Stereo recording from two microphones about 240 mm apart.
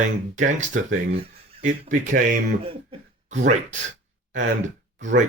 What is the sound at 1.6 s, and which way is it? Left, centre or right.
Speech, right.